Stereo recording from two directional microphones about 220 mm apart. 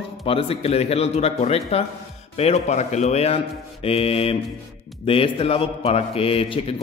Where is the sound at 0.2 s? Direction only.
25° left (ahead or behind).